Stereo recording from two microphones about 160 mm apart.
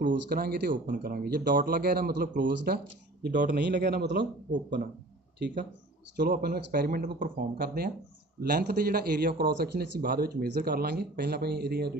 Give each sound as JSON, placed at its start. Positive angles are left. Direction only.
{"t": 0.0, "sound": "speech", "side_deg": -70}
{"t": 5.4, "sound": "speech", "side_deg": -90}
{"t": 6.1, "sound": "a man's voice", "side_deg": -75}